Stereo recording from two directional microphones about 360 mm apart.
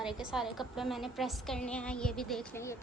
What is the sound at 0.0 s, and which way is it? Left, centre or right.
A woman's voice, centre.